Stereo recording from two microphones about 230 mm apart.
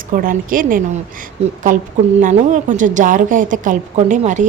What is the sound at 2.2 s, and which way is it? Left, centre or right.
A woman's voice, right.